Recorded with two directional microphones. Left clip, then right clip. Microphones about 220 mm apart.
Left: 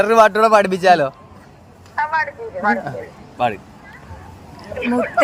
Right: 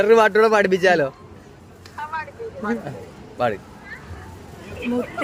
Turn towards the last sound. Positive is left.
turn(degrees=25)  # may be behind; listen again after turning